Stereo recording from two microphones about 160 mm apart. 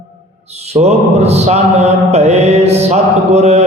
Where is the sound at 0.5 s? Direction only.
40° right (ahead or behind).